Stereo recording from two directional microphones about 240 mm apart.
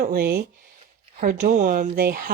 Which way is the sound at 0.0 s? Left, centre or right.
Right.